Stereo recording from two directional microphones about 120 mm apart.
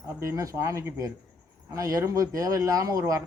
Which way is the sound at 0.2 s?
25° right (ahead or behind).